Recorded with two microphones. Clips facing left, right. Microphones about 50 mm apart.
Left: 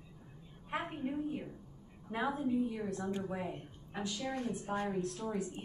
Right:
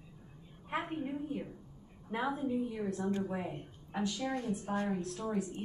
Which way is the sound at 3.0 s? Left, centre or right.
Centre.